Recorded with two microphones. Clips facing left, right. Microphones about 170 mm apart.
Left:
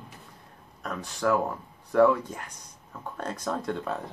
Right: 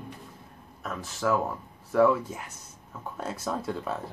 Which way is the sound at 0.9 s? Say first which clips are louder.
Left 1 dB; centre (ahead or behind).